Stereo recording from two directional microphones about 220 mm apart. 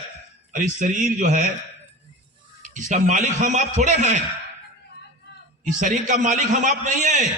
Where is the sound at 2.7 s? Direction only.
35° right (ahead or behind).